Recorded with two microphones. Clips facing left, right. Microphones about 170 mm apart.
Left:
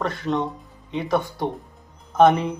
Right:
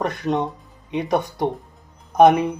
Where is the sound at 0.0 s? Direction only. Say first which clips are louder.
Right 2 dB; 15° right (ahead or behind).